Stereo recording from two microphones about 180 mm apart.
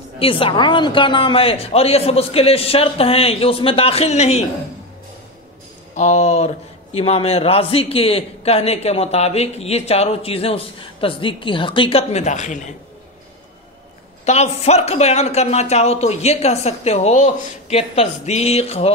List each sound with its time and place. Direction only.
0.2 s a man's voice: 30° left (ahead or behind)
5.9 s a man's voice: 40° left (ahead or behind)
14.2 s a man's voice: 35° left (ahead or behind)